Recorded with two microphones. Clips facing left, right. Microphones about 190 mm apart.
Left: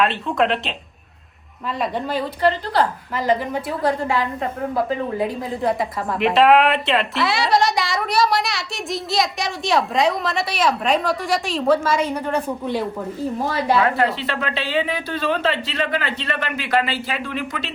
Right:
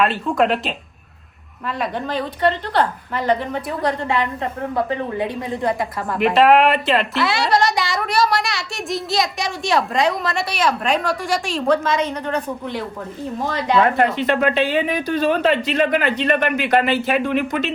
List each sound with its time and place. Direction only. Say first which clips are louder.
0.0 s a woman's voice: right 2 dB; centre (ahead or behind)
5.4 s a woman's voice: even; centre (ahead or behind)
14.3 s speech: right 7 dB; 50° right (ahead or behind)
14.8 s speech: right 4 dB; 15° right (ahead or behind)
15.1 s speech: right 5 dB; 50° right (ahead or behind)